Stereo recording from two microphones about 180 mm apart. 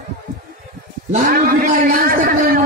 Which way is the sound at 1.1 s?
55° right (ahead or behind).